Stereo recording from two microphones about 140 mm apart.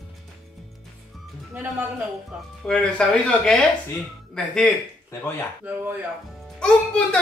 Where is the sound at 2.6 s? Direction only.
5° left (ahead or behind).